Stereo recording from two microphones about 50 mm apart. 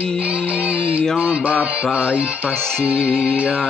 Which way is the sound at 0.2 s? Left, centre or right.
Right.